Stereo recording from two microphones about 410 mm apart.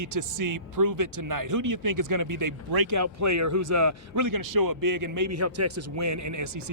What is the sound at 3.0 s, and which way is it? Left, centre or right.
Speech, right.